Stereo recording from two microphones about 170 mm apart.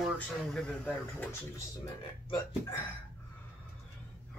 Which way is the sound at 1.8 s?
25° left (ahead or behind).